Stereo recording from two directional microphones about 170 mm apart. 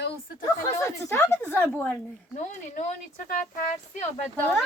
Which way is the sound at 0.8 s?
15° left (ahead or behind).